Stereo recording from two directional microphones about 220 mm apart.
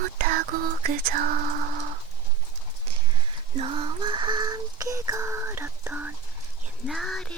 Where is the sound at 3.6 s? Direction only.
25° right (ahead or behind); by 6.1 s 10° right (ahead or behind).